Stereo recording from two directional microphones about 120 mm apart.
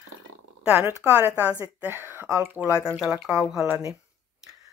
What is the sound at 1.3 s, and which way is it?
Speech, 20° left (ahead or behind).